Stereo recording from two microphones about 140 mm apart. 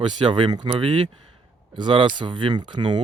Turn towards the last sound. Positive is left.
turn(degrees=-35)  # may be behind; listen again after turning